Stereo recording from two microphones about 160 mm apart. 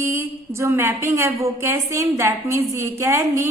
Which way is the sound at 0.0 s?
15° right (ahead or behind).